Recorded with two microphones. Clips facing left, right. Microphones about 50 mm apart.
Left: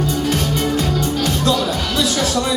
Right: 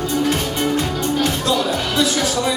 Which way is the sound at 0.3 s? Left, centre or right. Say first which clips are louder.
Even; centre.